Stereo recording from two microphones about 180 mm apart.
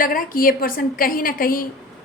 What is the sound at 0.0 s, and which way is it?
A woman's voice, 50° left (ahead or behind).